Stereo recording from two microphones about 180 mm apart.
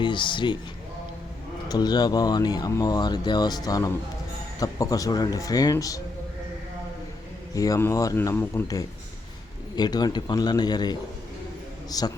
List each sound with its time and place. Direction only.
0.0 s speech: 25° left (ahead or behind)
1.6 s speech: 20° left (ahead or behind)
7.5 s a man's voice: 20° left (ahead or behind)